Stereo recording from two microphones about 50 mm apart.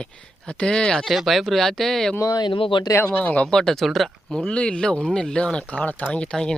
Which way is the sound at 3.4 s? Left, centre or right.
Centre.